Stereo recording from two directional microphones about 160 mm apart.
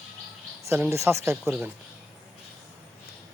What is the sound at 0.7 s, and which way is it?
Speech, 15° right (ahead or behind).